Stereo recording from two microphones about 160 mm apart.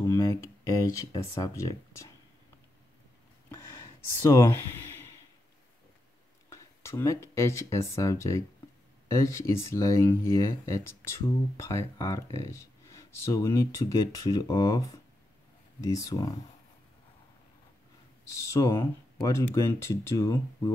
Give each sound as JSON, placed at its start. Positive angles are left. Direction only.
{"t": 0.0, "sound": "speech", "side_deg": 20}
{"t": 3.4, "sound": "a sound", "side_deg": 15}
{"t": 6.5, "sound": "speech", "side_deg": 15}
{"t": 18.5, "sound": "speech", "side_deg": 20}